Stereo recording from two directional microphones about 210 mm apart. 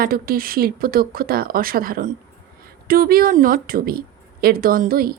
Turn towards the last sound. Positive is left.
turn(degrees=-45)  # may be behind; listen again after turning